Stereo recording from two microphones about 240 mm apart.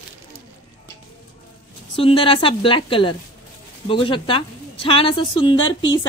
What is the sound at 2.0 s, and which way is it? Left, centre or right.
A woman's voice, left.